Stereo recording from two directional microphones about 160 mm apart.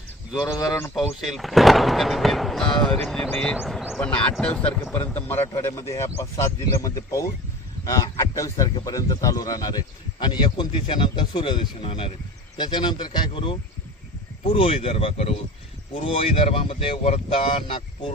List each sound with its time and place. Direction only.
0.6 s speech: 15° left (ahead or behind)
0.9 s speech: centre (ahead or behind); by 17.8 s 35° left (ahead or behind)